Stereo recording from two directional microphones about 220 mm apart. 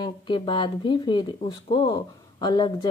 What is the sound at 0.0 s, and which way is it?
Speech, 20° left (ahead or behind).